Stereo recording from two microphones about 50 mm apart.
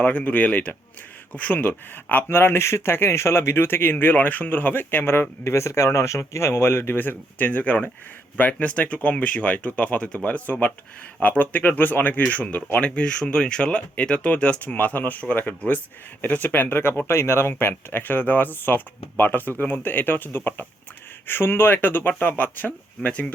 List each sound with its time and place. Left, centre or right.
0.0 s speech: left
5.4 s speech: left
17.1 s speech: left